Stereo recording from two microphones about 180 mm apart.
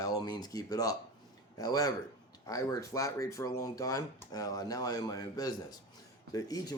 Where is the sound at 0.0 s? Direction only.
20° left (ahead or behind).